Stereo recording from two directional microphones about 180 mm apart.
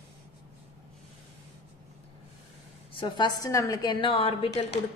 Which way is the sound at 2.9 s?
25° left (ahead or behind).